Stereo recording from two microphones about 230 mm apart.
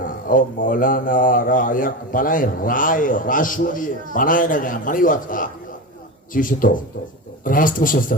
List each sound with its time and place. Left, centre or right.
0.0 s speech: left